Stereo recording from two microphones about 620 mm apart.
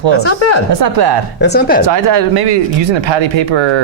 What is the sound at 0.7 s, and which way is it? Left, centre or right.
Speech, right.